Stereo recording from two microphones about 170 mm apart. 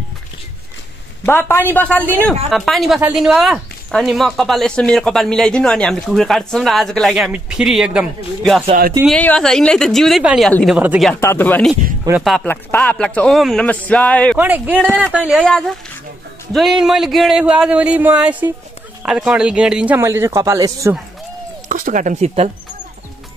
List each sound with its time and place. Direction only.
1.2 s a man's voice: 10° left (ahead or behind)
10.8 s speech: 10° right (ahead or behind)
11.1 s a man's voice: 15° left (ahead or behind)
14.3 s speech: 10° right (ahead or behind)
16.8 s speech: centre (ahead or behind); by 20.9 s 20° right (ahead or behind)
21.6 s speech: 50° right (ahead or behind)